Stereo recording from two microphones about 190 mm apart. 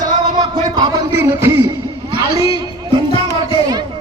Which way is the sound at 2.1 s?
20° right (ahead or behind).